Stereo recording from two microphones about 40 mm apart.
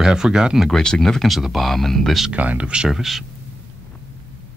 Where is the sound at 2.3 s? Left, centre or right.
Right.